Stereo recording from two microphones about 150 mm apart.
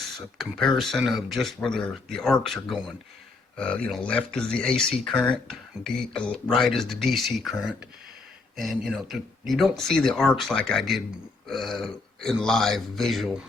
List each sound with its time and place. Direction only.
0.3 s speech: centre (ahead or behind)